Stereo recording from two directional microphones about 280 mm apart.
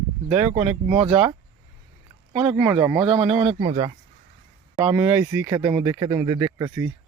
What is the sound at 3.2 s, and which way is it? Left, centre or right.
A man's voice, right.